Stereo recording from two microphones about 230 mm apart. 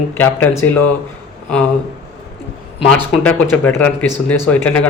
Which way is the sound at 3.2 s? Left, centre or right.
Centre.